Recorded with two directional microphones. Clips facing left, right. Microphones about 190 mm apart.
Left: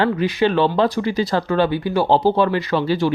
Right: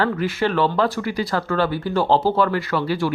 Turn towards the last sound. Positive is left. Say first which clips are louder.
# left 3 dB
turn(degrees=25)  # may be behind; listen again after turning